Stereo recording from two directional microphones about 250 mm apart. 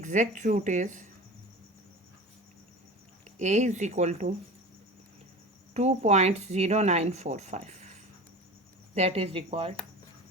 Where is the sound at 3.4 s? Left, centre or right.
Right.